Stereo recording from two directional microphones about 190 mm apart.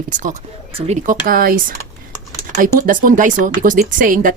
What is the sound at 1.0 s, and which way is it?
Speech, 50° right (ahead or behind).